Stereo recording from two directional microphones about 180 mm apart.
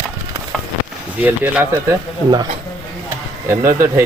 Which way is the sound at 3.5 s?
15° right (ahead or behind).